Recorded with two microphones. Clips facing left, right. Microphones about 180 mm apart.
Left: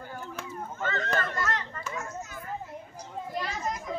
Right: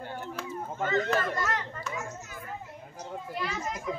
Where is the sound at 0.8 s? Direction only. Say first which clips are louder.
Right 3 dB; 15° right (ahead or behind).